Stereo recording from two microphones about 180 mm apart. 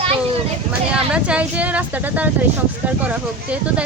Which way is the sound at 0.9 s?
5° right (ahead or behind).